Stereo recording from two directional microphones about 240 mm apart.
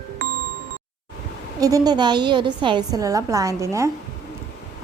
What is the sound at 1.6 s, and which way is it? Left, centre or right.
A woman's voice, centre.